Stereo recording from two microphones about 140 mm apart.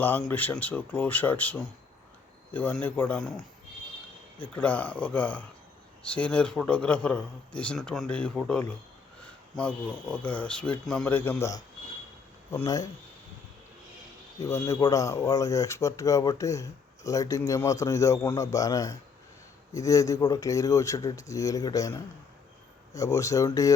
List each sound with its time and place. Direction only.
0.0 s speech: 15° left (ahead or behind)
4.5 s speech: 10° left (ahead or behind)
14.3 s speech: 20° left (ahead or behind)